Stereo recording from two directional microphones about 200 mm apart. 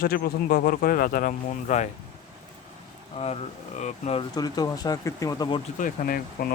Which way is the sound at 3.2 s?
30° left (ahead or behind).